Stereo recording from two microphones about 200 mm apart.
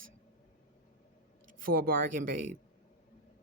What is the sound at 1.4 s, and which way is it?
Speech, 45° right (ahead or behind).